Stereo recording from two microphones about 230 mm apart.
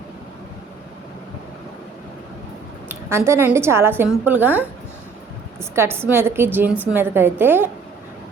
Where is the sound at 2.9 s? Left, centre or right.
Centre.